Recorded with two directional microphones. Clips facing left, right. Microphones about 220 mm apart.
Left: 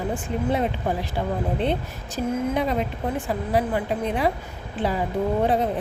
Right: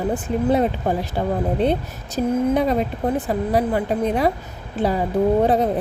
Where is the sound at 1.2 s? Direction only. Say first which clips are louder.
Right 6 dB; 40° right (ahead or behind).